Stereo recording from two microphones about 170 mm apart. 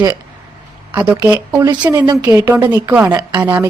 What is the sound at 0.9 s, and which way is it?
A woman's voice, 10° right (ahead or behind).